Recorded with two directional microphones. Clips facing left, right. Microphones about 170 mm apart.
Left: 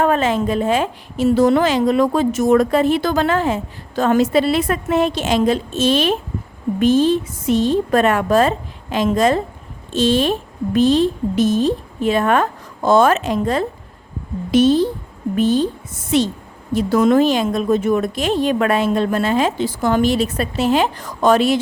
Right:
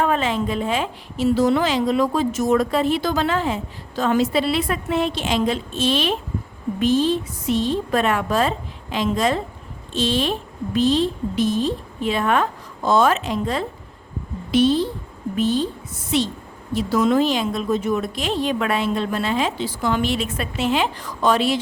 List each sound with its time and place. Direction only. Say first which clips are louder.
0.0 s a woman's voice: left 4 dB; 45° left (ahead or behind)